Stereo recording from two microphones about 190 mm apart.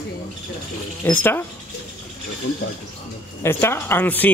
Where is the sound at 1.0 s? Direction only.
10° left (ahead or behind).